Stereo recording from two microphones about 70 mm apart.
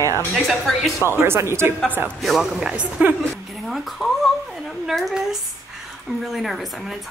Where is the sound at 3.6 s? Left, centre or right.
Centre.